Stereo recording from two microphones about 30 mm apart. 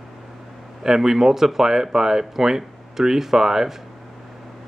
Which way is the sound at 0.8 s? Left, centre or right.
Centre.